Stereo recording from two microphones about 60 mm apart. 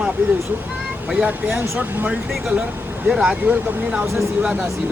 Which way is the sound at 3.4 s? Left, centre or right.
Right.